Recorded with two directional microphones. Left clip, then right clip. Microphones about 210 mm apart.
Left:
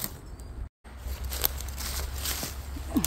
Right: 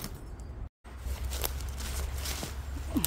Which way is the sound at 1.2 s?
15° left (ahead or behind).